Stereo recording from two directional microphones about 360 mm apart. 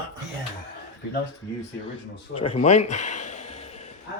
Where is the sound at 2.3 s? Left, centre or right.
Centre.